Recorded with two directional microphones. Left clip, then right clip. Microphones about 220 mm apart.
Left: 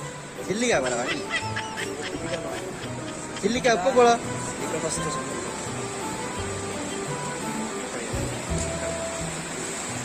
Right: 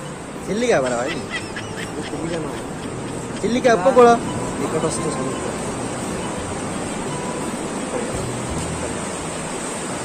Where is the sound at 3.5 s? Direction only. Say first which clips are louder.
Right 6 dB; 20° left (ahead or behind).